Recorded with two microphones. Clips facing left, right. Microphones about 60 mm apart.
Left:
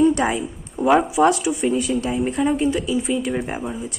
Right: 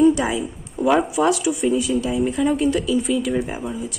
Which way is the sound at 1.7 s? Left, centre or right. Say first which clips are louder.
Right 2 dB; left.